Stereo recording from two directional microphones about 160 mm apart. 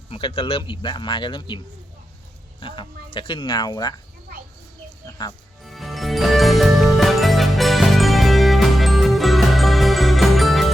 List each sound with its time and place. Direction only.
0.1 s speech: 35° left (ahead or behind)
2.6 s speech: 30° left (ahead or behind)
5.2 s speech: 30° left (ahead or behind)
5.6 s music: centre (ahead or behind)